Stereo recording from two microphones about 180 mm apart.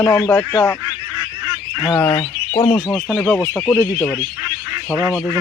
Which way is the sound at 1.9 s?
10° left (ahead or behind).